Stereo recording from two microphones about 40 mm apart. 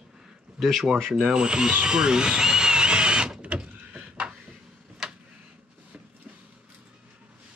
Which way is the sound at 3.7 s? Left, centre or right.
Right.